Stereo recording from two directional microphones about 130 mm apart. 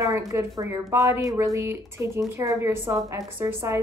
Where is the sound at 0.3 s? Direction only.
25° right (ahead or behind).